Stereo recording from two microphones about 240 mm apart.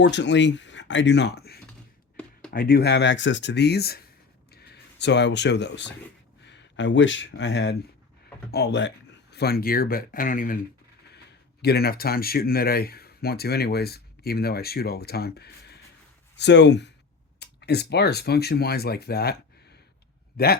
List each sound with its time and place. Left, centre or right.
0.0 s speech: left
11.6 s speech: left